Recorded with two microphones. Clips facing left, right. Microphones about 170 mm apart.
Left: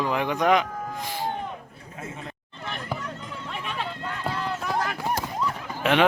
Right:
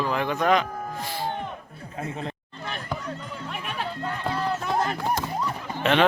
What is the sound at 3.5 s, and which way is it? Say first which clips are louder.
Run: left 1 dB; 5° right (ahead or behind).